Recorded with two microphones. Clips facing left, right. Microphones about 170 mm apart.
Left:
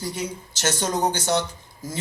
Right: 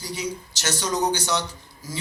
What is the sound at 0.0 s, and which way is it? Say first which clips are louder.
A man's voice: left 1 dB; 55° left (ahead or behind).